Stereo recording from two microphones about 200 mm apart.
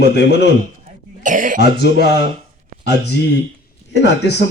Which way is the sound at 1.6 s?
55° left (ahead or behind).